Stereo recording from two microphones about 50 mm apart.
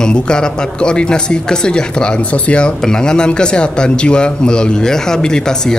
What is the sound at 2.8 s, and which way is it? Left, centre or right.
A woman's voice, centre.